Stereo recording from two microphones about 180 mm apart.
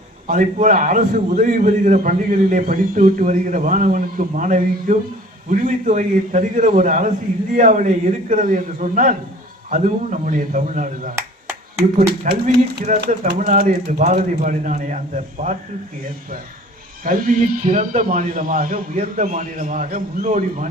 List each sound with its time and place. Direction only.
0.3 s a man's voice: 45° right (ahead or behind)
12.3 s speech: 65° right (ahead or behind)
13.2 s a man's voice: 45° right (ahead or behind)
17.0 s a man's voice: 50° right (ahead or behind)